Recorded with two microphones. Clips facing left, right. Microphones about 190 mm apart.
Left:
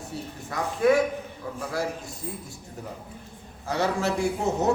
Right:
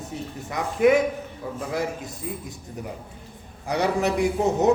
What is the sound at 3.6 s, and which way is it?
Speech, 15° right (ahead or behind).